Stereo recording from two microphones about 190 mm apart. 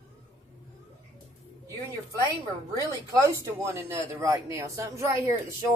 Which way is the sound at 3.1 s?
15° right (ahead or behind).